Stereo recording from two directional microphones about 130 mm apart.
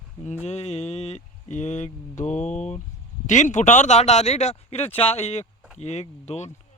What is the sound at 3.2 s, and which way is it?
Speech, 65° left (ahead or behind).